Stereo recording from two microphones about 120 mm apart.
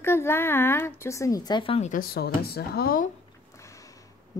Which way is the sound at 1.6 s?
65° left (ahead or behind).